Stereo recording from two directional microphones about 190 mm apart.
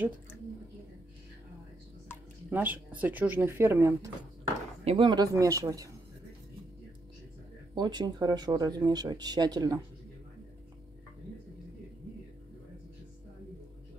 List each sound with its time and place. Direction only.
2.5 s speech: 10° right (ahead or behind)
4.8 s speech: 25° right (ahead or behind)
7.7 s speech: 20° right (ahead or behind)